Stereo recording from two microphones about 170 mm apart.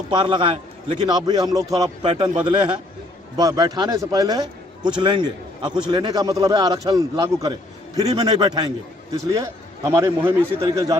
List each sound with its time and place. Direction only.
0.1 s a man's voice: 25° right (ahead or behind)